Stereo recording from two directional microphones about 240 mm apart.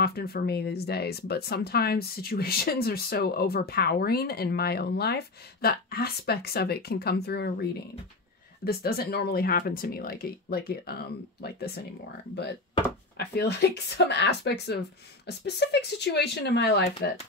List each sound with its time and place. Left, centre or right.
0.0 s speech: left
8.6 s speech: left
13.2 s speech: left